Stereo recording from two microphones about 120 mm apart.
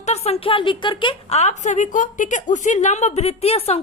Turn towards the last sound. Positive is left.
turn(degrees=60)  # may be behind; listen again after turning